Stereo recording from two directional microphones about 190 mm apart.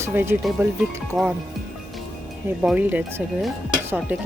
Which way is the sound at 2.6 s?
5° right (ahead or behind).